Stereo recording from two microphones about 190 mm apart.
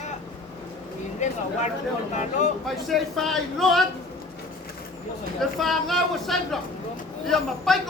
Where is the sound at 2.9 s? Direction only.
Centre (ahead or behind).